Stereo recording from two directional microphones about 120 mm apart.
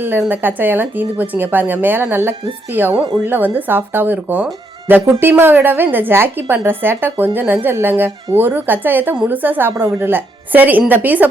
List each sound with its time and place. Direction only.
0.0 s speech: 15° right (ahead or behind)